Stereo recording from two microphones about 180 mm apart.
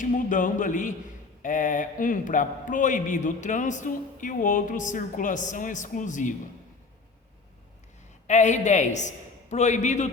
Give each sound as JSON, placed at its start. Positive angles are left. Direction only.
{"t": 0.0, "sound": "a man's voice", "side_deg": 45}
{"t": 8.3, "sound": "a man's voice", "side_deg": 40}